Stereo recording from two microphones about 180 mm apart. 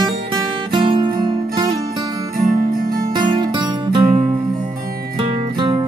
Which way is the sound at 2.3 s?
50° right (ahead or behind).